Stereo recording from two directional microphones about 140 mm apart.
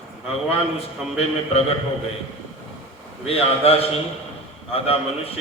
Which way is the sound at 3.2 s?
45° left (ahead or behind).